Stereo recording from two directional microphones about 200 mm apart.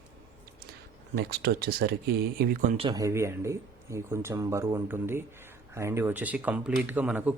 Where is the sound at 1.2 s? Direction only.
50° right (ahead or behind).